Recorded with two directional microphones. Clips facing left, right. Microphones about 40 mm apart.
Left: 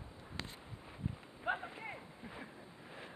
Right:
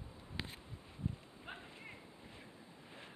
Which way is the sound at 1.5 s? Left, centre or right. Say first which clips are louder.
Left 13 dB; left.